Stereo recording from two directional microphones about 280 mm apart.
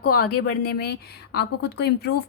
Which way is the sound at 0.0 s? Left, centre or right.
Left.